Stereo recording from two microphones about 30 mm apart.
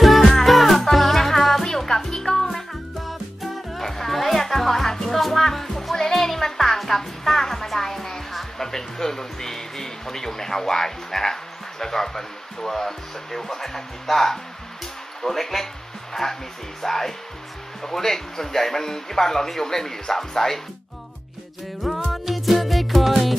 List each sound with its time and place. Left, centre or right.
0.0 s music: centre
1.9 s music: centre
2.5 s music: centre
11.8 s speech: centre
22.1 s music: centre